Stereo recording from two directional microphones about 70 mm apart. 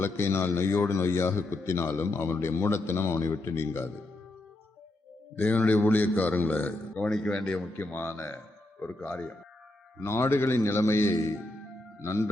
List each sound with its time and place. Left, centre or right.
0.0 s a man's voice: left
5.4 s a man's voice: left
7.1 s a man's voice: centre
7.8 s a man's voice: left
10.0 s a man's voice: left